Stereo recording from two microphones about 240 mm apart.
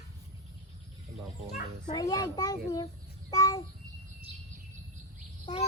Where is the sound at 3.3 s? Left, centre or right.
Centre.